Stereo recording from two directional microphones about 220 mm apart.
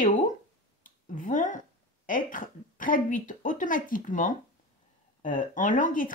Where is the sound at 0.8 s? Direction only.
35° left (ahead or behind).